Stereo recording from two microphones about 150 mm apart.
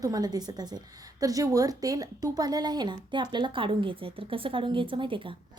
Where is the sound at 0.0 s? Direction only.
25° right (ahead or behind).